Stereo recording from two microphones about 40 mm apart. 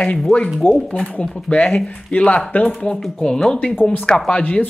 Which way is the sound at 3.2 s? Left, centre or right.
Centre.